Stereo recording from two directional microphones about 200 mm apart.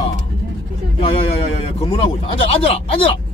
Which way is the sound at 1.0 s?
30° left (ahead or behind).